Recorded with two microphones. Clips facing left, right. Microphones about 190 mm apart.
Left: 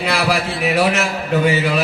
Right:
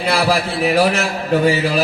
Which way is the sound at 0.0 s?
35° right (ahead or behind).